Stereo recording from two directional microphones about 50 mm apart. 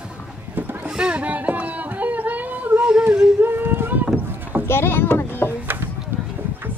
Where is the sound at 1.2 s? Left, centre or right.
Right.